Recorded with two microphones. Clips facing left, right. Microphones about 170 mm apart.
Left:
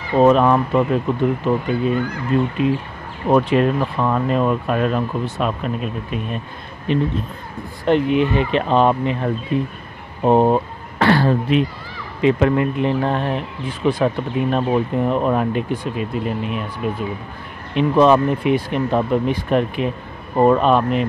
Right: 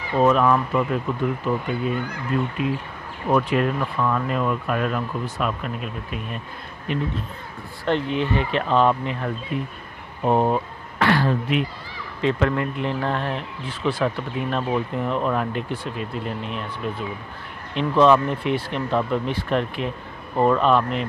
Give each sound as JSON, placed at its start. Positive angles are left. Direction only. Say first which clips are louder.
{"t": 0.2, "sound": "speech", "louder": "left 5 dB", "side_deg": 25}
{"t": 7.8, "sound": "speech", "louder": "left 7 dB", "side_deg": 15}
{"t": 12.2, "sound": "speech", "louder": "left 6 dB", "side_deg": 15}